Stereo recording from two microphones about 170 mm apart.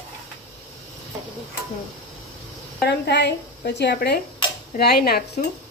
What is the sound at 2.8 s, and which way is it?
A woman's voice, 75° left (ahead or behind).